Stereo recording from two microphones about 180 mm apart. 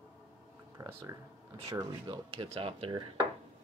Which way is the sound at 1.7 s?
20° right (ahead or behind).